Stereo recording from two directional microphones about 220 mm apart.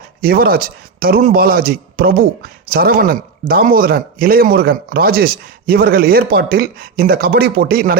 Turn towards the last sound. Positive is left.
turn(degrees=-45)  # may be behind; listen again after turning